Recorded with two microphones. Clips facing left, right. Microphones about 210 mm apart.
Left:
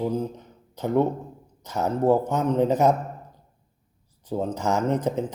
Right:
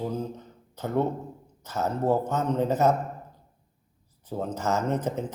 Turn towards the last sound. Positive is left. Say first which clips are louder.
# left 3 dB
turn(degrees=15)  # may be behind; listen again after turning